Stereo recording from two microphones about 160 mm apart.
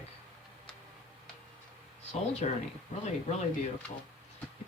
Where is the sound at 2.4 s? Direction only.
45° left (ahead or behind).